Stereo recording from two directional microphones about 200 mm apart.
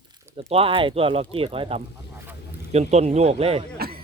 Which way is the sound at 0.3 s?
30° right (ahead or behind).